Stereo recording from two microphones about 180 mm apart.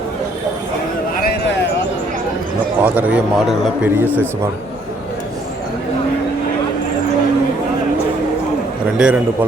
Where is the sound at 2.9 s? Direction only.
10° right (ahead or behind).